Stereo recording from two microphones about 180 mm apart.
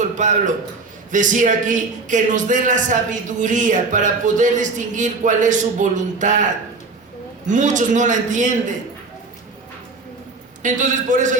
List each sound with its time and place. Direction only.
0.0 s a man's voice: 45° right (ahead or behind)
7.4 s a man's voice: 45° right (ahead or behind)
10.6 s a man's voice: 45° right (ahead or behind)